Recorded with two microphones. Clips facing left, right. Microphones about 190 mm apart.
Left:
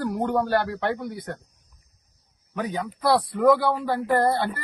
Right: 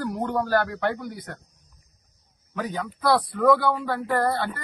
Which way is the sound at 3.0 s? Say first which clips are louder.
Left 1 dB; 25° left (ahead or behind).